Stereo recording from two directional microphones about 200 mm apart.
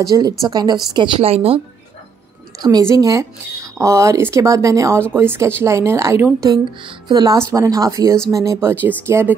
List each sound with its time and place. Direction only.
0.1 s a woman's voice: 20° right (ahead or behind)
2.6 s speech: 15° right (ahead or behind)